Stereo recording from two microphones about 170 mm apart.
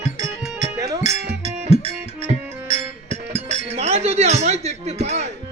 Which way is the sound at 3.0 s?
40° right (ahead or behind).